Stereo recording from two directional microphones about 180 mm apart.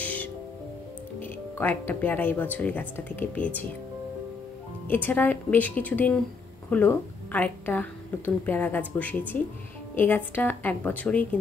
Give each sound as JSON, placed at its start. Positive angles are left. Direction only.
{"t": 0.0, "sound": "music", "side_deg": 10}
{"t": 1.2, "sound": "speech", "side_deg": 10}
{"t": 4.8, "sound": "a woman's voice", "side_deg": 10}